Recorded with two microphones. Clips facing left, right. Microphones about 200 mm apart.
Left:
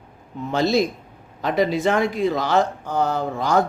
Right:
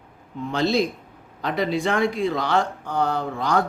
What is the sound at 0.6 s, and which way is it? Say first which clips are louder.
Speech: left 2 dB; 45° left (ahead or behind).